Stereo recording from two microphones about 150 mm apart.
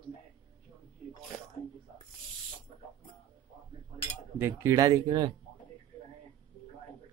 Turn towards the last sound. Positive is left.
turn(degrees=-25)  # may be behind; listen again after turning